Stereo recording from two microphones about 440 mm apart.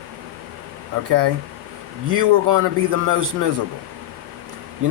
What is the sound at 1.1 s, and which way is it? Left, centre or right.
Speech, right.